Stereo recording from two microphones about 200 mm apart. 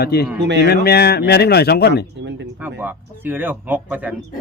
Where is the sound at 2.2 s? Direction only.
60° right (ahead or behind).